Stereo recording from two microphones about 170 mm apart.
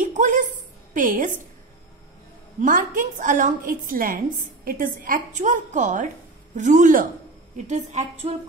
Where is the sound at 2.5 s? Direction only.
50° right (ahead or behind).